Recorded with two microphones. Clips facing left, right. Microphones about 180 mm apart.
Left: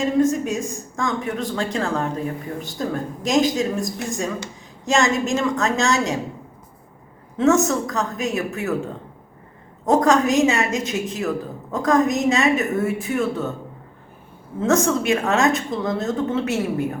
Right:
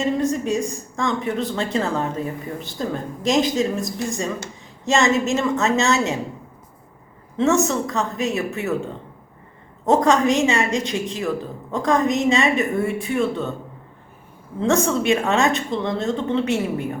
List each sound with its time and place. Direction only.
0.0 s a woman's voice: centre (ahead or behind)
7.3 s a woman's voice: centre (ahead or behind)
14.6 s a woman's voice: centre (ahead or behind)